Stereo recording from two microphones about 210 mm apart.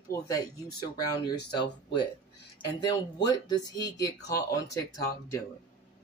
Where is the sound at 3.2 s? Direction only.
20° left (ahead or behind).